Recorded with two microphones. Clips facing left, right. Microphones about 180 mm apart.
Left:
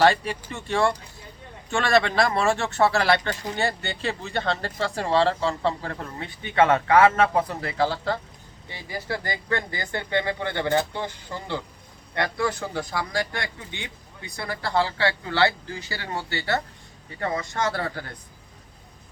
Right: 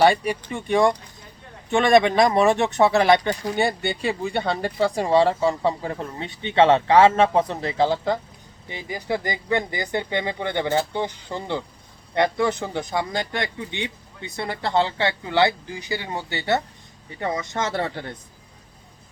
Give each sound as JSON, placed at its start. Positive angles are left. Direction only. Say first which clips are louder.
{"t": 0.0, "sound": "a man's voice", "louder": "right 2 dB", "side_deg": -10}